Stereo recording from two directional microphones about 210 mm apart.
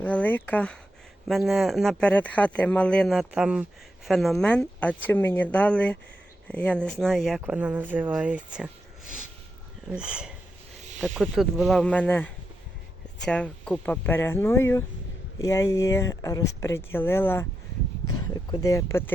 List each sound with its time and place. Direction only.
0.0 s speech: 5° left (ahead or behind)
9.8 s speech: 5° right (ahead or behind); by 19.1 s 15° left (ahead or behind)